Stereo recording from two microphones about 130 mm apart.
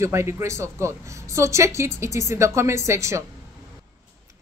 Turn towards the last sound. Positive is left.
turn(degrees=-20)  # may be behind; listen again after turning